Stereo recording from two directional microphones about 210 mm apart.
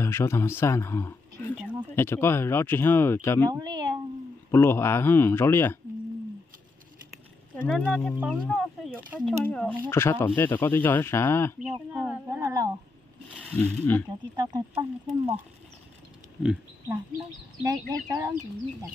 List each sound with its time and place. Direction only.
0.0 s speech: 10° left (ahead or behind)
3.4 s speech: 20° right (ahead or behind)
4.5 s speech: 10° left (ahead or behind)
7.5 s speech: 5° left (ahead or behind)
11.9 s a sound: 5° right (ahead or behind)
12.3 s a sound: 15° right (ahead or behind)
13.4 s speech: 5° left (ahead or behind)
14.3 s speech: 15° right (ahead or behind)
17.6 s speech: 15° right (ahead or behind)